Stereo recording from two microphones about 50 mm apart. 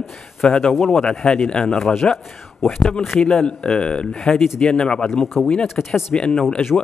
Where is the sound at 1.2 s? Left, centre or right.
Centre.